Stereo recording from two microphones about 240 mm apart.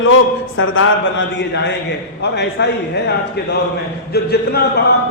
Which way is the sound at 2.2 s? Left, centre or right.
Left.